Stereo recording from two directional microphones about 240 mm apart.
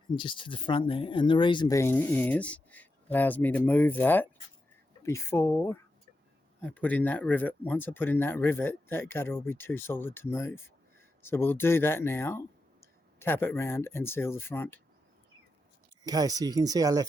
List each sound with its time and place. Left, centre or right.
0.2 s speech: left
16.0 s speech: centre